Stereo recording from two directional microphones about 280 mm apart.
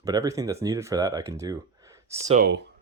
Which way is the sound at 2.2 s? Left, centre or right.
Right.